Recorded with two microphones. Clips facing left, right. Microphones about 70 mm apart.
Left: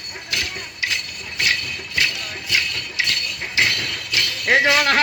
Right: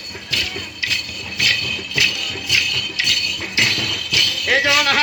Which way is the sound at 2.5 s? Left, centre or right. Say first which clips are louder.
Right 1 dB; left.